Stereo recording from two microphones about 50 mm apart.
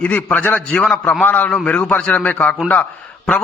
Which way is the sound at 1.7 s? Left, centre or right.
Left.